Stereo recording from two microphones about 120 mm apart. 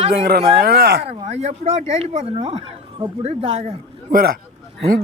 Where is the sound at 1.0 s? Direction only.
65° right (ahead or behind).